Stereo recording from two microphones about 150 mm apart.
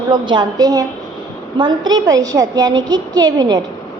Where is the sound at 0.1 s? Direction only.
30° right (ahead or behind).